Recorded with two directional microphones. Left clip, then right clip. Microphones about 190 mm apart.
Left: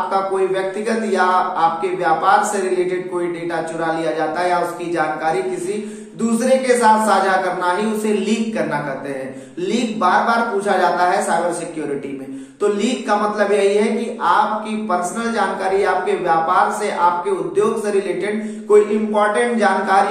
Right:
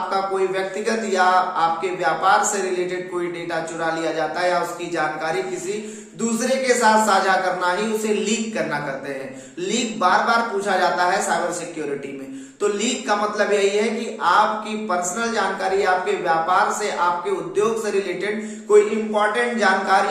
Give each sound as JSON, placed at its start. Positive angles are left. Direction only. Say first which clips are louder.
{"t": 0.1, "sound": "speech", "louder": "left 1 dB", "side_deg": -20}
{"t": 3.8, "sound": "speech", "louder": "left 3 dB", "side_deg": -20}
{"t": 9.7, "sound": "speech", "louder": "left 2 dB", "side_deg": -20}
{"t": 12.6, "sound": "speech", "louder": "left 3 dB", "side_deg": -20}